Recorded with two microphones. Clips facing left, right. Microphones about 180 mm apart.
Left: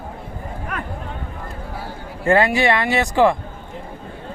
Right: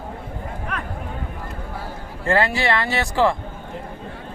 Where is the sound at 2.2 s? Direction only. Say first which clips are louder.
Left 4 dB; 15° left (ahead or behind).